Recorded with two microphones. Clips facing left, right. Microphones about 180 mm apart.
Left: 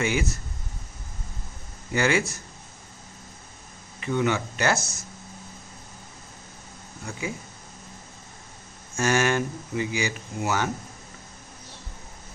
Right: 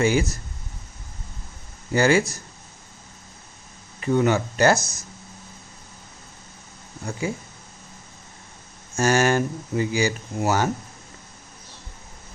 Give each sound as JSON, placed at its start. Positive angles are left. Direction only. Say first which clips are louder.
{"t": 0.0, "sound": "speech", "louder": "right 5 dB", "side_deg": -35}
{"t": 1.9, "sound": "speech", "louder": "right 5 dB", "side_deg": -35}
{"t": 4.0, "sound": "speech", "louder": "right 5 dB", "side_deg": -40}
{"t": 4.8, "sound": "speech", "louder": "left 1 dB", "side_deg": -15}
{"t": 7.1, "sound": "speech", "louder": "right 5 dB", "side_deg": -35}
{"t": 9.0, "sound": "speech", "louder": "right 3 dB", "side_deg": -40}